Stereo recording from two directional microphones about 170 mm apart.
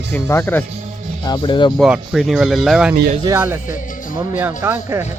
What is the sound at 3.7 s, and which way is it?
Speech, 50° left (ahead or behind).